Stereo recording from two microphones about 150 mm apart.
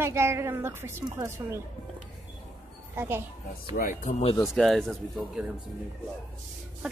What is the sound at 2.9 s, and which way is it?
Speech, 15° right (ahead or behind).